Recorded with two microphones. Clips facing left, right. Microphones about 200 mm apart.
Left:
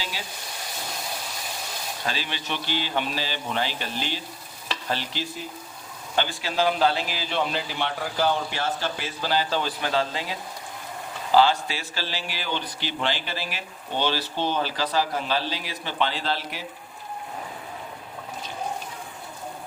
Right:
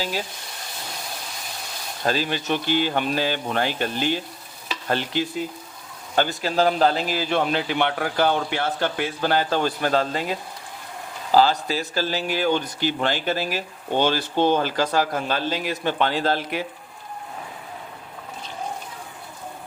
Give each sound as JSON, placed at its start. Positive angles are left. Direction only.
{"t": 2.0, "sound": "speech", "side_deg": -45}
{"t": 6.1, "sound": "speech", "side_deg": -40}
{"t": 11.3, "sound": "speech", "side_deg": -40}